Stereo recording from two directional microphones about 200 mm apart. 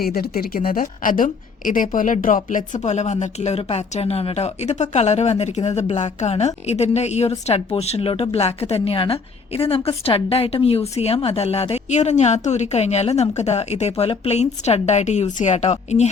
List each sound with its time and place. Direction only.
0.0 s a woman's voice: 50° left (ahead or behind); by 16.0 s 35° left (ahead or behind)